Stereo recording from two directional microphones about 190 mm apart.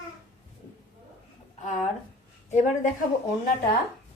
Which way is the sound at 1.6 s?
40° left (ahead or behind).